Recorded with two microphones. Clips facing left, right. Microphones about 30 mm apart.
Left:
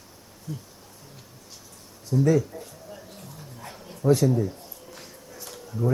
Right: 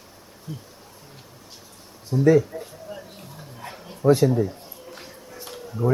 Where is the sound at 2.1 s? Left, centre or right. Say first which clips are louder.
Right 4 dB; right.